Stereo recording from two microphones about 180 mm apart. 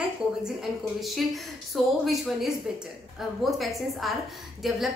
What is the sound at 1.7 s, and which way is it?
A woman's voice, centre (ahead or behind).